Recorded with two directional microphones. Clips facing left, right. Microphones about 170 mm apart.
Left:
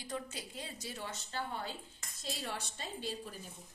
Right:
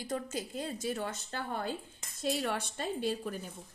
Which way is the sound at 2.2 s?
65° right (ahead or behind).